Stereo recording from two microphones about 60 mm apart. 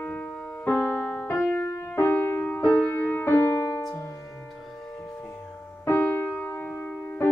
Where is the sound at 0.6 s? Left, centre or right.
Left.